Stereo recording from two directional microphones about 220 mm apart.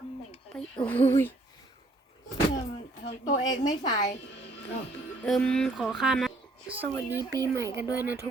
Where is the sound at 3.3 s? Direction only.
20° left (ahead or behind).